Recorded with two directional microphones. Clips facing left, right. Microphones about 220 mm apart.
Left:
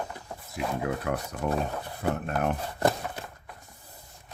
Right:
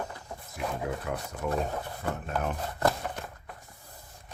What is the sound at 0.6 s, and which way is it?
Speech, 65° left (ahead or behind).